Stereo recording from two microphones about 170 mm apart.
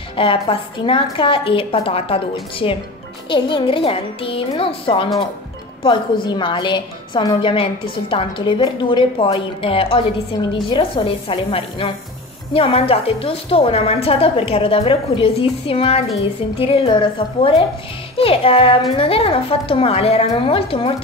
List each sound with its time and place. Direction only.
0.2 s a woman's voice: 30° left (ahead or behind)